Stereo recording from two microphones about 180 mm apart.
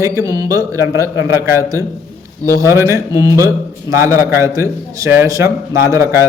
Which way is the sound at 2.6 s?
15° right (ahead or behind).